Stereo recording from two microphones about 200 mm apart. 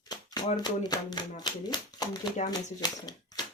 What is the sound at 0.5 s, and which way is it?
Speech, 20° left (ahead or behind).